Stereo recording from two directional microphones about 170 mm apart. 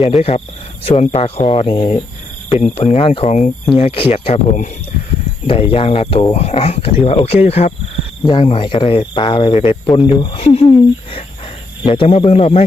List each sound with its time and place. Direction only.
0.0 s speech: 35° left (ahead or behind)
8.2 s speech: 30° left (ahead or behind)